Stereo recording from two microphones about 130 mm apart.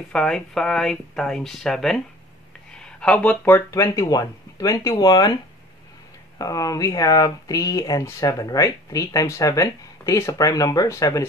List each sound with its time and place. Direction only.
0.1 s speech: 5° left (ahead or behind); by 11.2 s 25° left (ahead or behind)